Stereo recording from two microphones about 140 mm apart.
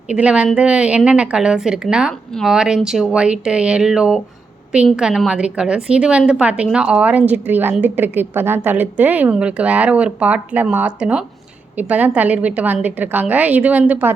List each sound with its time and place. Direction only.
0.1 s a woman's voice: 10° right (ahead or behind)